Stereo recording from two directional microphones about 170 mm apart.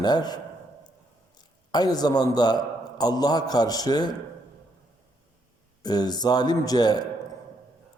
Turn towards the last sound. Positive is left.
turn(degrees=25)  # may be behind; listen again after turning